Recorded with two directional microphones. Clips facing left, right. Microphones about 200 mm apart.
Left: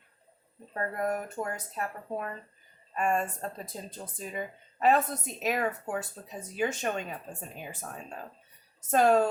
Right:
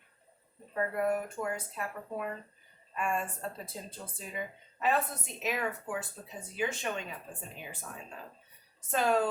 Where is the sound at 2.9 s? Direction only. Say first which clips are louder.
Left 5 dB; 45° left (ahead or behind).